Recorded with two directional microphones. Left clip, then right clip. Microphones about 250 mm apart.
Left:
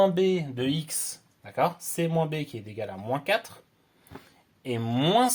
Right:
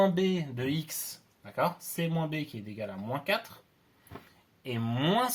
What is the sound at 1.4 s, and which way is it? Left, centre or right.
Speech, left.